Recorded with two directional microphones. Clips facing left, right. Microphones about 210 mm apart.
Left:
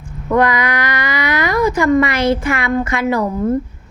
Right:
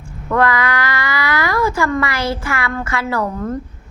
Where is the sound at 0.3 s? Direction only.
15° left (ahead or behind).